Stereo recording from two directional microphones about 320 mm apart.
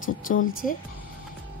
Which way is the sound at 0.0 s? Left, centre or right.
Left.